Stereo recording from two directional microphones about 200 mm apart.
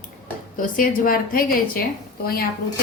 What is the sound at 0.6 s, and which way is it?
A woman's voice, 45° left (ahead or behind).